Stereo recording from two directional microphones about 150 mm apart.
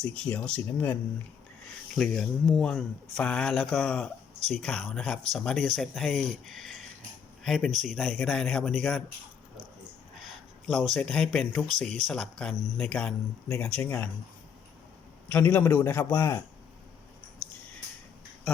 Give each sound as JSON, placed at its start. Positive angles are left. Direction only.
{"t": 0.0, "sound": "a man's voice", "side_deg": 5}
{"t": 2.0, "sound": "speech", "side_deg": 5}
{"t": 7.7, "sound": "speech", "side_deg": -55}
{"t": 7.9, "sound": "speech", "side_deg": 0}
{"t": 10.7, "sound": "a man's voice", "side_deg": 0}
{"t": 15.3, "sound": "a man's voice", "side_deg": 10}